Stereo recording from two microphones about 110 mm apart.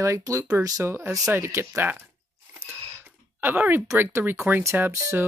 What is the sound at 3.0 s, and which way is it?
Speech, 15° right (ahead or behind).